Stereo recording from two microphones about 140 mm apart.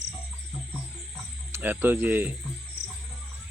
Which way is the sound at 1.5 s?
15° right (ahead or behind).